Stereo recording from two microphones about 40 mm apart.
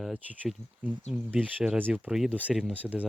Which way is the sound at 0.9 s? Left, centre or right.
Right.